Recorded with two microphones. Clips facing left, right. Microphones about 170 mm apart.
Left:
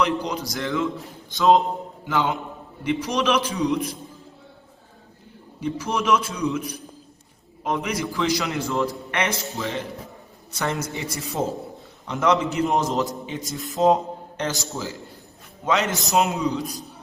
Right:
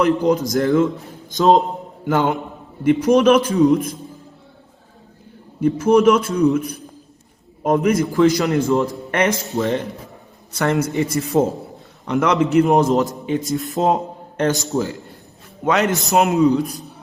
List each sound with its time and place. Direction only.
0.0 s a man's voice: 45° right (ahead or behind)
5.5 s a man's voice: 45° right (ahead or behind)
6.6 s a man's voice: centre (ahead or behind)
7.6 s a man's voice: 45° right (ahead or behind)
10.6 s a man's voice: 60° right (ahead or behind)
15.6 s a man's voice: 50° right (ahead or behind)
16.1 s a man's voice: 60° right (ahead or behind)